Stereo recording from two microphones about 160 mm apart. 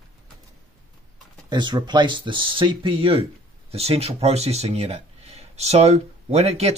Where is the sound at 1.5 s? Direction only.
30° right (ahead or behind).